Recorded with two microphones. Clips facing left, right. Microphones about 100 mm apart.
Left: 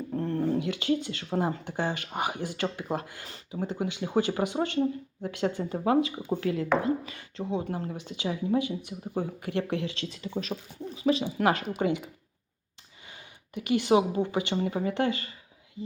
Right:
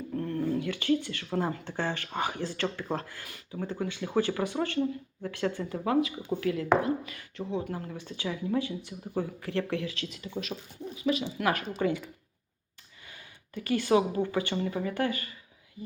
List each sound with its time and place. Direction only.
0.1 s a sound: 30° left (ahead or behind)
0.6 s speech: 20° left (ahead or behind)
5.7 s speech: 30° left (ahead or behind)
7.7 s speech: 30° left (ahead or behind)
7.9 s speech: 20° left (ahead or behind); by 11.4 s 40° left (ahead or behind)
11.7 s speech: 20° left (ahead or behind)
13.1 s speech: 20° left (ahead or behind)